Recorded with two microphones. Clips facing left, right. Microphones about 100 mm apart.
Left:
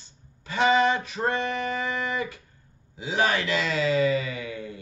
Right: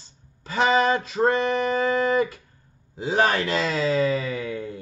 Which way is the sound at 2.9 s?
45° right (ahead or behind).